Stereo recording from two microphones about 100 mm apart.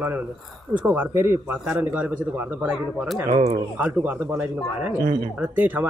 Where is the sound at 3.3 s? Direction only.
75° right (ahead or behind).